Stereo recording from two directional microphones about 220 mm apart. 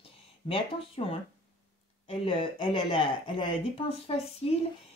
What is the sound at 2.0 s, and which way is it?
Speech, 25° left (ahead or behind).